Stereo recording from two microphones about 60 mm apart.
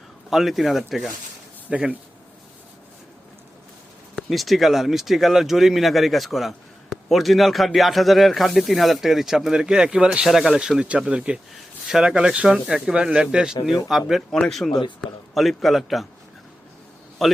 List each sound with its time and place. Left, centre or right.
0.3 s speech: centre
4.1 s speech: centre
14.3 s speech: centre
17.2 s speech: centre